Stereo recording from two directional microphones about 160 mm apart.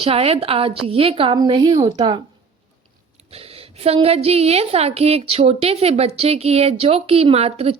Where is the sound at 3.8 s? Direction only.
40° right (ahead or behind).